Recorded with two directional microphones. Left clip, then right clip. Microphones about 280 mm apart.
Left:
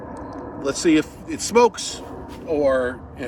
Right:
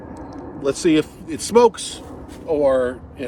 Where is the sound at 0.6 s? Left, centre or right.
Centre.